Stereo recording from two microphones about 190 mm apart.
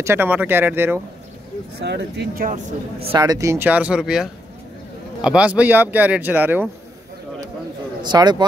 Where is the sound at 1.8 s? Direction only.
65° right (ahead or behind).